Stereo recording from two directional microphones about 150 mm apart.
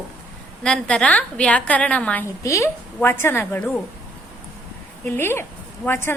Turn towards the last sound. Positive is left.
turn(degrees=15)  # may be behind; listen again after turning